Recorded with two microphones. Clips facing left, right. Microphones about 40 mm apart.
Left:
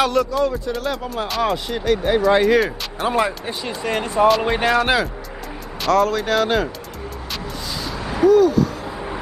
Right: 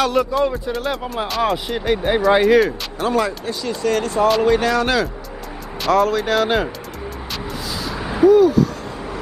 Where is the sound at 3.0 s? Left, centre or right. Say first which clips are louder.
Right 1 dB; centre.